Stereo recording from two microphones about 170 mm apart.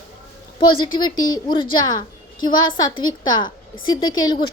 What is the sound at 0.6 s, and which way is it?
Speech, 30° left (ahead or behind).